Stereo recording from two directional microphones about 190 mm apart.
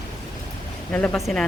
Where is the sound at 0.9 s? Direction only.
5° left (ahead or behind).